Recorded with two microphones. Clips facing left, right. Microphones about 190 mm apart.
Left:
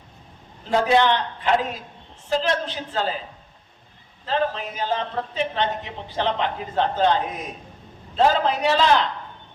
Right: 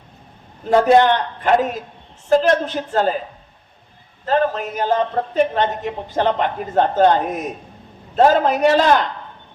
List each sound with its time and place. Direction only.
0.9 s a man's voice: 50° right (ahead or behind)
4.3 s a man's voice: 50° right (ahead or behind)